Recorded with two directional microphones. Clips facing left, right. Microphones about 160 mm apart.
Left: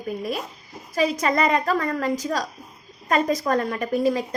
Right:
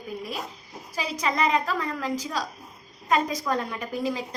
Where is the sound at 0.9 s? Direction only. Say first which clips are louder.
Left 6 dB; 50° left (ahead or behind).